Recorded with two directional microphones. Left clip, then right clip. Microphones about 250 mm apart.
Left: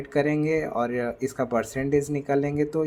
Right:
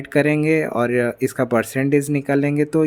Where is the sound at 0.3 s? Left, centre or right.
Right.